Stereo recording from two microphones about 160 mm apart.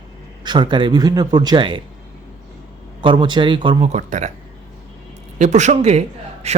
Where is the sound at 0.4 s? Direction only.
30° right (ahead or behind).